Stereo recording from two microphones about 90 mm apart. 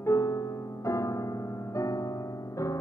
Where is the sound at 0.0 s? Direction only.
35° left (ahead or behind).